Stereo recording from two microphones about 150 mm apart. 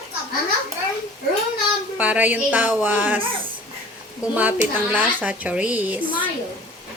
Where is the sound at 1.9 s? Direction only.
10° right (ahead or behind).